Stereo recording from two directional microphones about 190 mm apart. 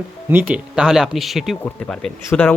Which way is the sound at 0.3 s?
10° right (ahead or behind).